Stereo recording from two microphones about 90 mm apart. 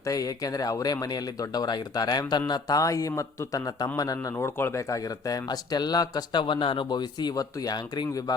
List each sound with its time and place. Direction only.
0.0 s speech: 40° left (ahead or behind)
4.8 s speech: 40° left (ahead or behind)
6.4 s speech: 70° left (ahead or behind); by 8.4 s 45° left (ahead or behind)